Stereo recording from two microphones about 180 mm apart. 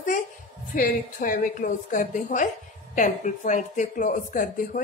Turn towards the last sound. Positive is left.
turn(degrees=45)  # may be behind; listen again after turning